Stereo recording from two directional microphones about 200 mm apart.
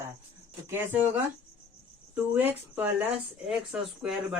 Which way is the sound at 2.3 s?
10° right (ahead or behind).